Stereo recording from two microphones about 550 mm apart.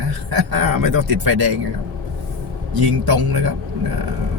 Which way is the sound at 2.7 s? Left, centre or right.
Right.